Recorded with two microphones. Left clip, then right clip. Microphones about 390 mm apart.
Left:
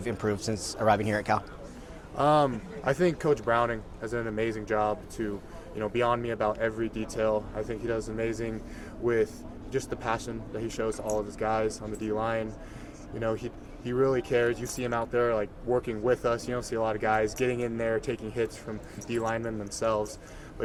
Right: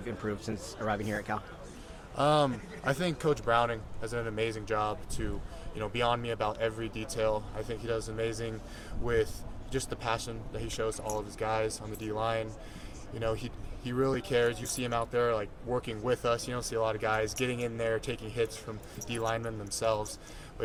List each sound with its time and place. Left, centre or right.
0.0 s speech: centre
2.1 s speech: right